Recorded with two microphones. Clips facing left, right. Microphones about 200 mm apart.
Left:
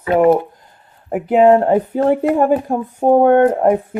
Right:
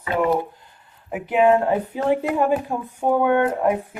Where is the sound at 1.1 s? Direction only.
45° left (ahead or behind).